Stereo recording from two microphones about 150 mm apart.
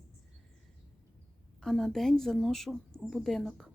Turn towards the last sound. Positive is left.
turn(degrees=0)  # may be behind; listen again after turning